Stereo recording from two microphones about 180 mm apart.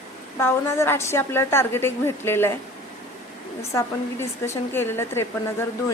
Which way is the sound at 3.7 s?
15° left (ahead or behind).